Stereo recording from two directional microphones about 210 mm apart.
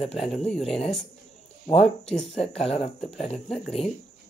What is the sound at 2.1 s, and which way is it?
Speech, 30° left (ahead or behind).